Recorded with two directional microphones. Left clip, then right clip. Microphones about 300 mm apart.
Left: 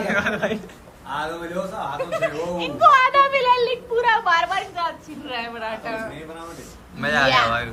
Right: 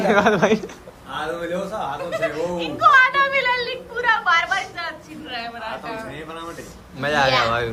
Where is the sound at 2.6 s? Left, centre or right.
Centre.